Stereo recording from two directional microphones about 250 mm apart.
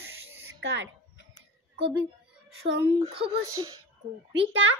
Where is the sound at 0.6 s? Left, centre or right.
Right.